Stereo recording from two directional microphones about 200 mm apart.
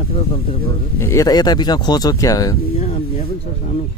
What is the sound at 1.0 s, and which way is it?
Speech, 15° left (ahead or behind).